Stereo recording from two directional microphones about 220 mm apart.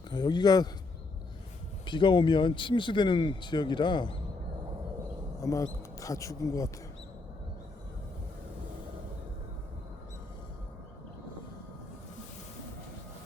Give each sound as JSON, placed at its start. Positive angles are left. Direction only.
{"t": 0.1, "sound": "speech", "side_deg": 20}
{"t": 1.9, "sound": "speech", "side_deg": 20}
{"t": 5.4, "sound": "speech", "side_deg": 15}